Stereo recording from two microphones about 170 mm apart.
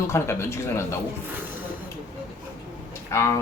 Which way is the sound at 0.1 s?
15° left (ahead or behind).